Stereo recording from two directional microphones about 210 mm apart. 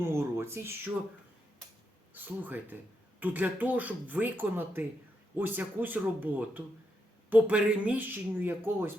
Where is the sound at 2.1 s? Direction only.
10° right (ahead or behind).